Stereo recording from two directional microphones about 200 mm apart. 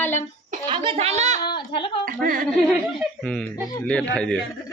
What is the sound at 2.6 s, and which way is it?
Speech, centre (ahead or behind).